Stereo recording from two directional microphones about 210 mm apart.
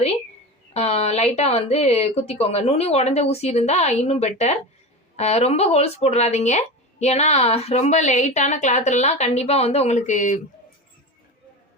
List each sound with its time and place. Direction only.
0.7 s speech: 30° left (ahead or behind)